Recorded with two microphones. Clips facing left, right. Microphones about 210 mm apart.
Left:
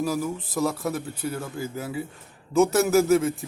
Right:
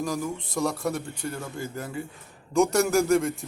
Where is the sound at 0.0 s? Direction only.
5° left (ahead or behind).